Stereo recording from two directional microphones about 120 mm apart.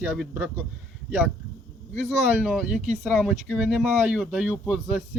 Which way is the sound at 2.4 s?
10° right (ahead or behind).